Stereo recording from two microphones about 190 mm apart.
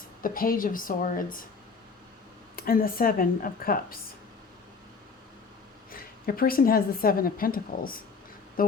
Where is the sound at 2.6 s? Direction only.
50° left (ahead or behind).